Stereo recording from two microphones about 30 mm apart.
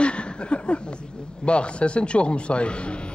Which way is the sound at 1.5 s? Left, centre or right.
Left.